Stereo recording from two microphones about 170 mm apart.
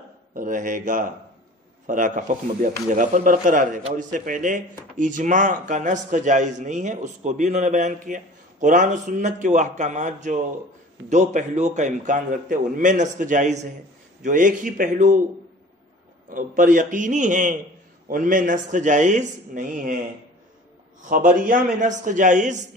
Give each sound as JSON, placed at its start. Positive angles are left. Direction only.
{"t": 0.3, "sound": "a man's voice", "side_deg": -50}
{"t": 16.3, "sound": "a man's voice", "side_deg": -50}
{"t": 21.1, "sound": "a man's voice", "side_deg": -50}